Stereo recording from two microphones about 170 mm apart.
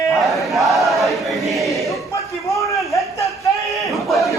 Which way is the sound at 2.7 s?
20° left (ahead or behind).